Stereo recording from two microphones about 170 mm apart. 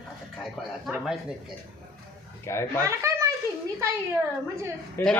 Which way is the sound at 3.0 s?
15° right (ahead or behind).